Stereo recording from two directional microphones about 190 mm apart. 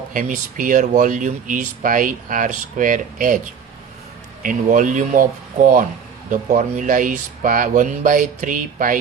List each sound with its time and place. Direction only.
0.1 s speech: 45° right (ahead or behind)
4.4 s speech: 45° right (ahead or behind)